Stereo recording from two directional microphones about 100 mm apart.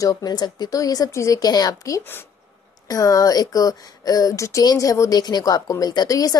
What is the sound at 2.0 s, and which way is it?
Speech, 20° left (ahead or behind).